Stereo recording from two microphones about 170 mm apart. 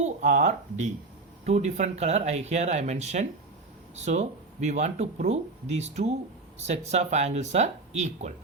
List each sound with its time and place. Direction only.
0.0 s speech: 45° right (ahead or behind)